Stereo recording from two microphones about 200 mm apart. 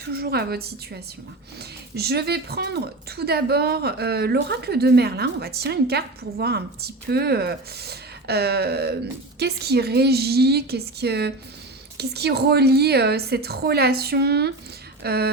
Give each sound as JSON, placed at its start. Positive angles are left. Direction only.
{"t": 0.1, "sound": "speech", "side_deg": -50}
{"t": 2.0, "sound": "speech", "side_deg": -55}